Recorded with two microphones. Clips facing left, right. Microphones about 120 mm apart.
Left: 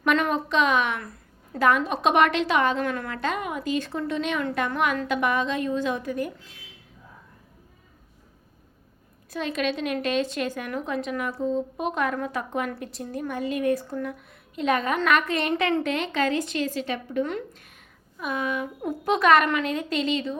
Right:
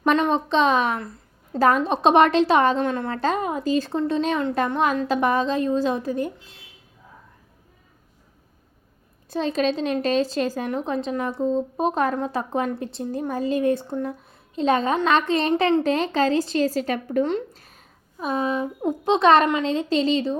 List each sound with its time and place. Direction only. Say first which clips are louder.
0.0 s a woman's voice: right 3 dB; 25° right (ahead or behind)
9.3 s a woman's voice: right 5 dB; 30° right (ahead or behind)
17.2 s a sound: right 6 dB; 30° right (ahead or behind)
18.8 s a woman's voice: right 4 dB; 20° right (ahead or behind)